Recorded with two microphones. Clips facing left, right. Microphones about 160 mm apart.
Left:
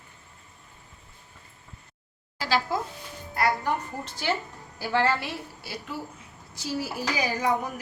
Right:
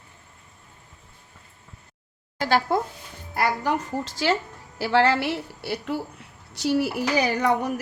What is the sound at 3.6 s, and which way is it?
A woman's voice, 90° right.